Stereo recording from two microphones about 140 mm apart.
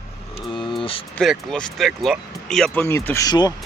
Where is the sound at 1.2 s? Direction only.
5° left (ahead or behind).